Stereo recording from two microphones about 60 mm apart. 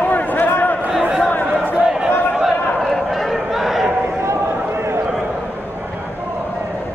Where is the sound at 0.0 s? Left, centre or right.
Left.